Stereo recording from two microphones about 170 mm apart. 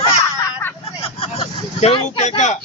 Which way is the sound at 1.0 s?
35° left (ahead or behind).